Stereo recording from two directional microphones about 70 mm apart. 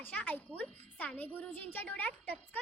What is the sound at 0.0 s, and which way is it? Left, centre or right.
A woman's voice, left.